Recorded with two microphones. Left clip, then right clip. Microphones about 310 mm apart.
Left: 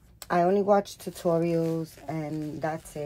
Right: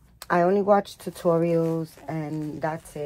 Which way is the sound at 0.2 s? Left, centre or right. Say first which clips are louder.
Right 2 dB; right.